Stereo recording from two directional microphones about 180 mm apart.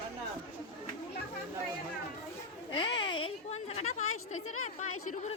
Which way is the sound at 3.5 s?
40° left (ahead or behind).